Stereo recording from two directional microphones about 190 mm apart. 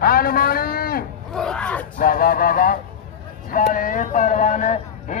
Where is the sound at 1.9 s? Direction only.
50° left (ahead or behind).